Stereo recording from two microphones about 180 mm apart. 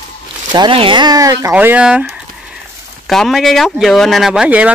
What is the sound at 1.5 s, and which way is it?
Speech, 10° right (ahead or behind).